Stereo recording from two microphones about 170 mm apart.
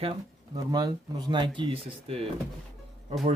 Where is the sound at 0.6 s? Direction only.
20° right (ahead or behind).